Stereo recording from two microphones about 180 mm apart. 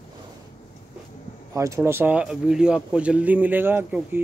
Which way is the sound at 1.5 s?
15° right (ahead or behind).